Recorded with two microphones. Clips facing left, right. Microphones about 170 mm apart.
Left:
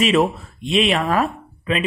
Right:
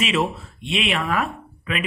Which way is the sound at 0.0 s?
45° left (ahead or behind).